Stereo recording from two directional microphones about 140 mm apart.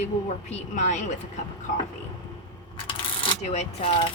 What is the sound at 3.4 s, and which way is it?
Speech, 50° left (ahead or behind).